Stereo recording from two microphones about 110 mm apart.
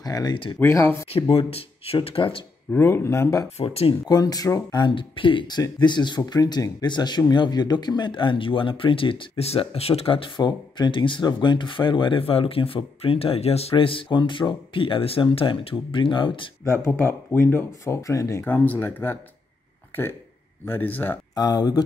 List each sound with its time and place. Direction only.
0.0 s speech: 35° left (ahead or behind)
0.6 s speech: 25° left (ahead or behind)
1.5 s speech: 60° left (ahead or behind)
2.7 s speech: 20° left (ahead or behind)
3.5 s speech: 60° left (ahead or behind)
4.1 s speech: 35° left (ahead or behind)
16.6 s speech: 25° left (ahead or behind)
18.4 s speech: 15° left (ahead or behind)
20.6 s speech: 15° left (ahead or behind)
21.4 s speech: 35° left (ahead or behind)